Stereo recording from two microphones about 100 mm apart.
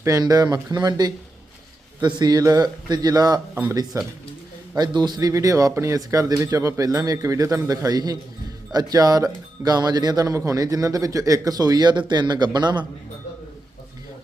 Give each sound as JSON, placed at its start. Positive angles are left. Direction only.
{"t": 0.0, "sound": "speech", "side_deg": -35}
{"t": 4.8, "sound": "speech", "side_deg": -45}